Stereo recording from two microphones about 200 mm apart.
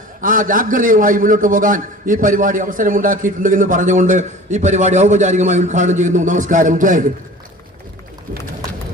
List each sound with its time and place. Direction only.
0.2 s a man's voice: 45° right (ahead or behind)